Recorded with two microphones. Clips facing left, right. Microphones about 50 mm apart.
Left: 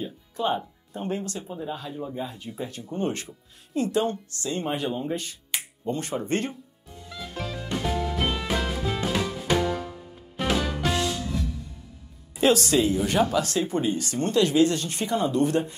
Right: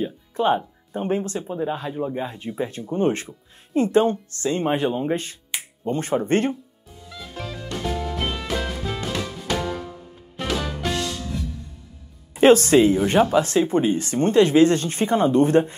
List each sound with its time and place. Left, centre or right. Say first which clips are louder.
0.0 s music: right 6 dB; right
0.9 s speech: right 6 dB; right
7.1 s music: even; centre
12.4 s speech: right 7 dB; right